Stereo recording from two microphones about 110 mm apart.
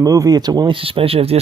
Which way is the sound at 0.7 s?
55° right (ahead or behind).